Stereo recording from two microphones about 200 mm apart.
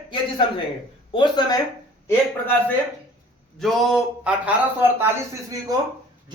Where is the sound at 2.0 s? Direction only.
10° left (ahead or behind); by 5.7 s 15° right (ahead or behind).